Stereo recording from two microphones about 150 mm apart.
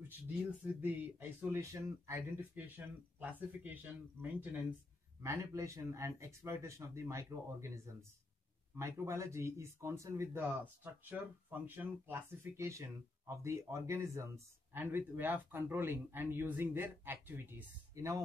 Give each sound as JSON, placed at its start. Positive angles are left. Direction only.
{"t": 0.7, "sound": "speech", "side_deg": -15}